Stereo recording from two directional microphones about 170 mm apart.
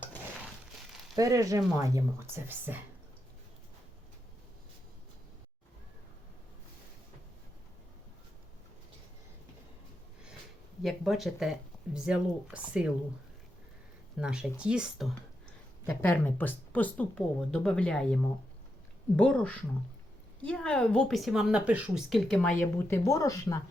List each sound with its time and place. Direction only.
1.1 s speech: 20° right (ahead or behind)
10.8 s a woman's voice: centre (ahead or behind)
14.2 s speech: 5° right (ahead or behind)
15.9 s speech: 10° left (ahead or behind)
23.0 s speech: 20° left (ahead or behind)